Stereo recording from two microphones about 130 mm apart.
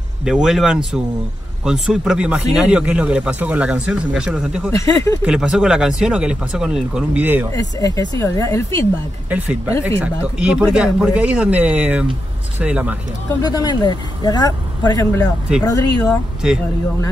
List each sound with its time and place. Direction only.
0.2 s speech: 5° right (ahead or behind)
4.6 s speech: 25° left (ahead or behind)
5.2 s speech: 5° right (ahead or behind)
7.5 s speech: 30° left (ahead or behind)
9.3 s speech: 10° right (ahead or behind)
13.4 s speech: 30° left (ahead or behind)
15.5 s speech: 5° right (ahead or behind)